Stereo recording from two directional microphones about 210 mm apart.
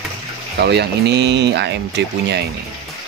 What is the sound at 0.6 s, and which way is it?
Speech, 50° right (ahead or behind).